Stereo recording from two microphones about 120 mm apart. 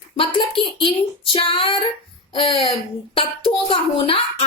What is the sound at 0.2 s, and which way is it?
Speech, 45° left (ahead or behind).